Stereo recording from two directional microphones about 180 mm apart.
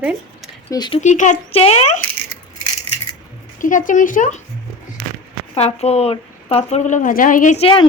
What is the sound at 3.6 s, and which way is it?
Speech, 45° left (ahead or behind).